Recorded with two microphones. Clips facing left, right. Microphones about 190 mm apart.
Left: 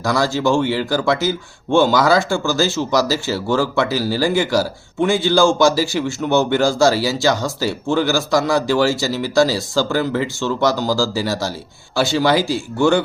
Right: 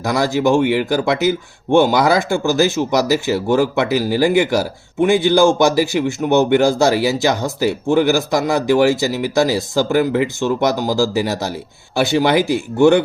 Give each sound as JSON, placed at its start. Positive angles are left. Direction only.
{"t": 0.0, "sound": "speech", "side_deg": -20}